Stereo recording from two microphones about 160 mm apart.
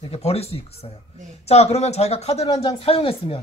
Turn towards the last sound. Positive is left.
turn(degrees=35)  # may be behind; listen again after turning